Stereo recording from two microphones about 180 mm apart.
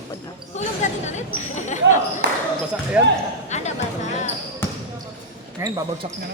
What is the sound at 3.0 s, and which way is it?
Speech, 10° right (ahead or behind).